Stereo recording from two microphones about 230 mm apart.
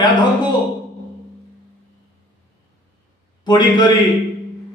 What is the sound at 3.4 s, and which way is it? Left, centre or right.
Speech, centre.